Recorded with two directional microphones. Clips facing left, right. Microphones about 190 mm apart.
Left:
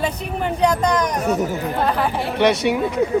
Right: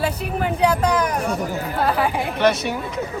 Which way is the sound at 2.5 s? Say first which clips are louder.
Left 5 dB; 65° left (ahead or behind).